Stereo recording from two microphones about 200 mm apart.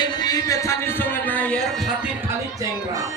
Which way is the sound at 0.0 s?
20° left (ahead or behind).